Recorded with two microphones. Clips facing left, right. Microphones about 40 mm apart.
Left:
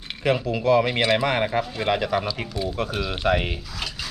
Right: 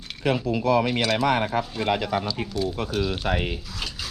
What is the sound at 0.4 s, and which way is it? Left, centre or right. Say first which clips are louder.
Speech: left 2 dB; left.